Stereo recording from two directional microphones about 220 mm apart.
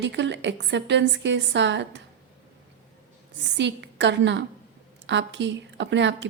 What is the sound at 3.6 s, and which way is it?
A woman's voice, 55° right (ahead or behind).